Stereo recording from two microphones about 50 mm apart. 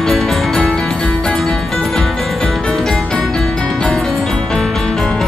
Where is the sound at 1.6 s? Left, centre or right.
Centre.